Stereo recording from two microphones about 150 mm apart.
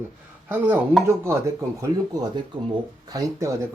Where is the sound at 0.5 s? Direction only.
15° right (ahead or behind).